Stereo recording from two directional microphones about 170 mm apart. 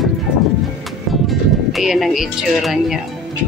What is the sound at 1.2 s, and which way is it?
Speech, centre (ahead or behind).